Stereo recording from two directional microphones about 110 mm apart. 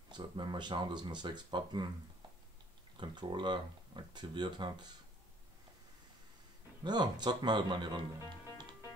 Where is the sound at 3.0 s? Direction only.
45° right (ahead or behind).